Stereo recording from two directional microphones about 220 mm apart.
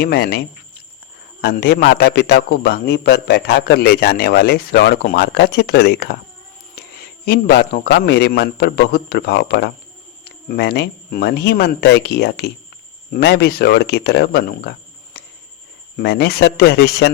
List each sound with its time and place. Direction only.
0.0 s a man's voice: 45° left (ahead or behind)
7.3 s a man's voice: 45° left (ahead or behind)
15.1 s cricket: 45° left (ahead or behind)
16.0 s a man's voice: 45° left (ahead or behind)